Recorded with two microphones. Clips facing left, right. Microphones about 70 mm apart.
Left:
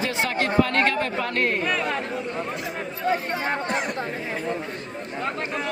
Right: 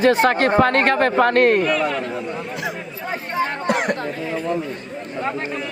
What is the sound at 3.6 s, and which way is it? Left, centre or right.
Speech, right.